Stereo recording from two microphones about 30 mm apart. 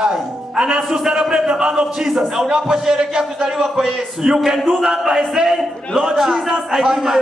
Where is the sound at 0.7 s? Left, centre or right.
Right.